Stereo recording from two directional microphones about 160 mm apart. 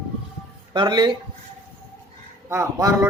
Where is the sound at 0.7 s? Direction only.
25° right (ahead or behind).